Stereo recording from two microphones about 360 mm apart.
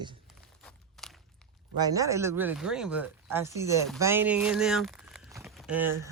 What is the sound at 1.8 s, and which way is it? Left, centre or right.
Speech, centre.